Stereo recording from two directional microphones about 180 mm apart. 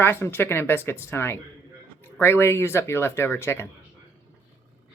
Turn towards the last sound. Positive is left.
turn(degrees=15)  # may be behind; listen again after turning